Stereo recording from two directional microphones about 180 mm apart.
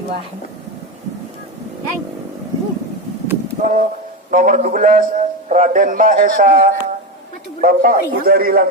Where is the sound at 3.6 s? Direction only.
45° right (ahead or behind).